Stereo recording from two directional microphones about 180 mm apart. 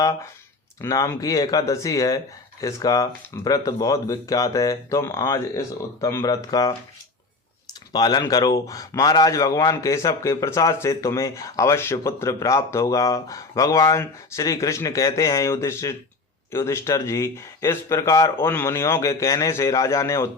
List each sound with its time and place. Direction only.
0.8 s speech: 20° left (ahead or behind)
7.9 s a man's voice: 20° left (ahead or behind)